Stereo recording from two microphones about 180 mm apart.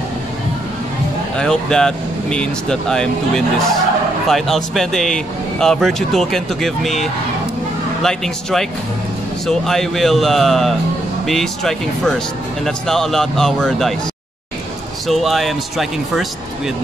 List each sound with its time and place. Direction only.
1.4 s speech: 5° left (ahead or behind)
15.0 s speech: centre (ahead or behind)